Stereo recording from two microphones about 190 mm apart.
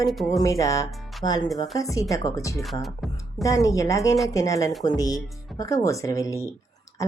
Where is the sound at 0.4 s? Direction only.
15° left (ahead or behind).